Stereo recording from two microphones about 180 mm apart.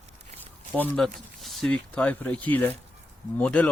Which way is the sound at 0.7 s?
5° left (ahead or behind).